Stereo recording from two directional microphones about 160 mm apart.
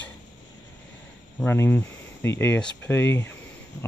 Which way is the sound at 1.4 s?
15° left (ahead or behind).